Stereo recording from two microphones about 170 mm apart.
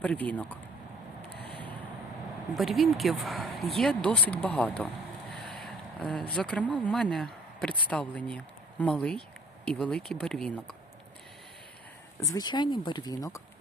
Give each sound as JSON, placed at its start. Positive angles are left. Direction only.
{"t": 0.0, "sound": "speech", "side_deg": 10}
{"t": 1.3, "sound": "a sound", "side_deg": 75}
{"t": 2.6, "sound": "speech", "side_deg": 0}
{"t": 12.2, "sound": "speech", "side_deg": 20}